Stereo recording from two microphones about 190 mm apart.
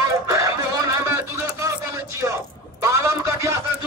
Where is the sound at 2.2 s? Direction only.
15° right (ahead or behind).